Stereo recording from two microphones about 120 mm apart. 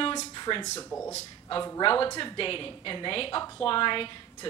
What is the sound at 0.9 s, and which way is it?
Speech, 20° left (ahead or behind).